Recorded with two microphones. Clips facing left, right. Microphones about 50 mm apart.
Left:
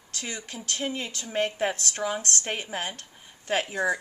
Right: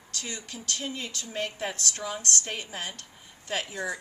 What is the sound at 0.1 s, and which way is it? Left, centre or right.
A woman's voice, left.